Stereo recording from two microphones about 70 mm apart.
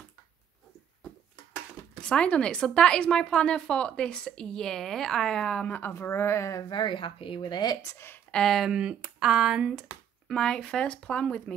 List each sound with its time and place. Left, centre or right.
2.0 s speech: centre
5.7 s speech: left
6.0 s a woman's voice: left
7.3 s speech: left
7.8 s speech: left
8.3 s speech: centre
8.5 s speech: centre
10.2 s speech: centre